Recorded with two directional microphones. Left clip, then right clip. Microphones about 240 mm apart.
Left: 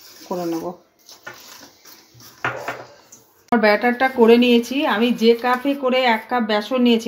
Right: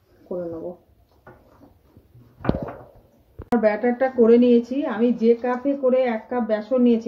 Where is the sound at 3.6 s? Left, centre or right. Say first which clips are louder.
Left 4 dB; left.